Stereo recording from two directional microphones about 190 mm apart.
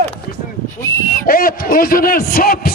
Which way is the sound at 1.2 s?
50° left (ahead or behind).